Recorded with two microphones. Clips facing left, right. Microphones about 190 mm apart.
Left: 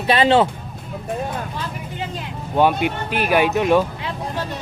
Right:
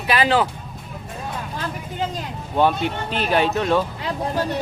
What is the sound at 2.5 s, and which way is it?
Speech, 10° left (ahead or behind).